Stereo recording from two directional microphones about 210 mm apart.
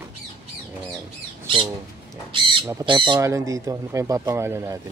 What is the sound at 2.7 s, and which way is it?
Speech, 20° right (ahead or behind).